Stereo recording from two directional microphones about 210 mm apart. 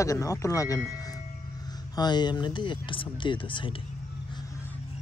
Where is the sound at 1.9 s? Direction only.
20° left (ahead or behind).